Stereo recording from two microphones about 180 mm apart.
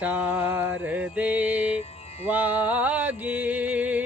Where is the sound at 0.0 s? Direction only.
10° right (ahead or behind).